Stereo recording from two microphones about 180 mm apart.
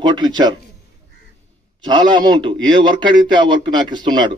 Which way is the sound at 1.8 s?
25° right (ahead or behind).